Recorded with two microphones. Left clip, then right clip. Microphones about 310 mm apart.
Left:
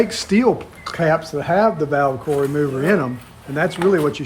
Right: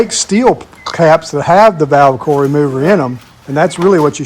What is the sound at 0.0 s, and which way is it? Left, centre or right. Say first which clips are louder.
Speech: right 6 dB; centre.